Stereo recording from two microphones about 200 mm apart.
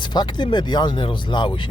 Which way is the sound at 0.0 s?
20° left (ahead or behind).